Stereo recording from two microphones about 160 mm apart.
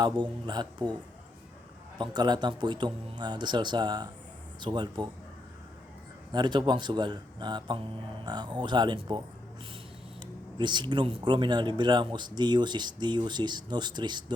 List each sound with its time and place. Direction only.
0.0 s speech: 25° right (ahead or behind)
2.0 s speech: 25° right (ahead or behind)
6.3 s speech: 30° right (ahead or behind)
10.6 s speech: 30° right (ahead or behind)